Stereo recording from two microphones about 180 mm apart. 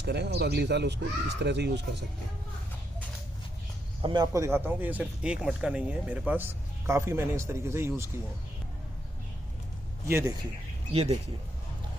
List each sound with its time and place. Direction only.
0.0 s speech: 65° right (ahead or behind)
4.0 s speech: 25° right (ahead or behind)
10.1 s speech: 15° right (ahead or behind)
10.9 s speech: 35° right (ahead or behind)